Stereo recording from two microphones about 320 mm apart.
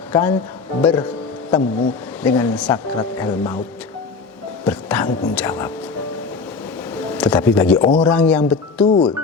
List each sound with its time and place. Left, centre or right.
0.1 s speech: centre
4.6 s speech: centre
7.2 s speech: centre
8.8 s speech: centre